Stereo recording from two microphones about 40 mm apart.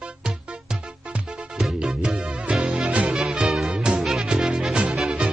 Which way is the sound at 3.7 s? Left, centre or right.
Centre.